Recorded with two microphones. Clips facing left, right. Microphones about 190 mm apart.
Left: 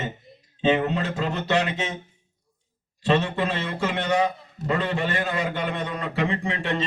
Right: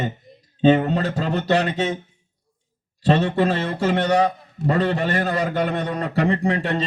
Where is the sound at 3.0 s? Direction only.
35° right (ahead or behind).